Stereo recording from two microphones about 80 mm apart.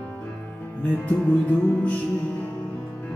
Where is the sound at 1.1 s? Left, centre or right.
Centre.